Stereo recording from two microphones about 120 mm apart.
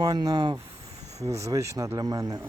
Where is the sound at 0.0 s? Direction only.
30° right (ahead or behind).